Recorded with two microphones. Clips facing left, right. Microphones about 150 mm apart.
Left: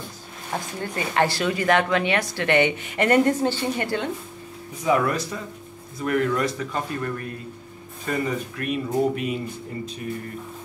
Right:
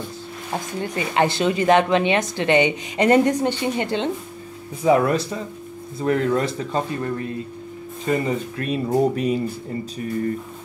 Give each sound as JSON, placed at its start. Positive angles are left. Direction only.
{"t": 0.8, "sound": "a woman's voice", "side_deg": -20}